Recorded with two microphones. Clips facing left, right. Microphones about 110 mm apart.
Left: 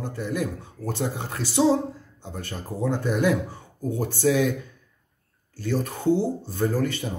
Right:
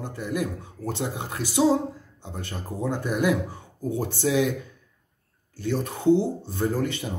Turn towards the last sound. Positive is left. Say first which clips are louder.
# left 1 dB
turn(degrees=-20)  # may be behind; listen again after turning